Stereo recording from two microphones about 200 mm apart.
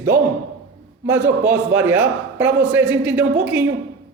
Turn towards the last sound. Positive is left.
turn(degrees=-5)  # may be behind; listen again after turning